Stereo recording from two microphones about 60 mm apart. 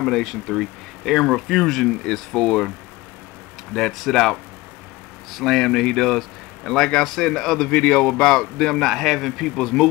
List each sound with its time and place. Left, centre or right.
0.0 s speech: centre
3.7 s a man's voice: centre